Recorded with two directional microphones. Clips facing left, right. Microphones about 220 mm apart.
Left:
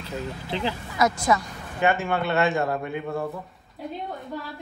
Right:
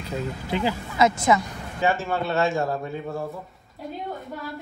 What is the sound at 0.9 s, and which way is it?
Speech, 25° right (ahead or behind).